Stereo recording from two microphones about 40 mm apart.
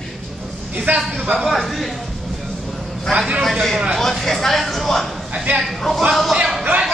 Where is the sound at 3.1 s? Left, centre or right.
Right.